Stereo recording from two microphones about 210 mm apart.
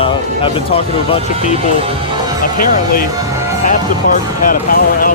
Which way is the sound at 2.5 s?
45° left (ahead or behind).